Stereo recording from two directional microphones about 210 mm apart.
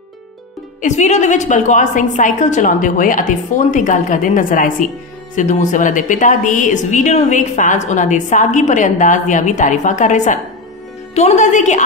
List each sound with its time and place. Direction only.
0.7 s a woman's voice: 35° left (ahead or behind)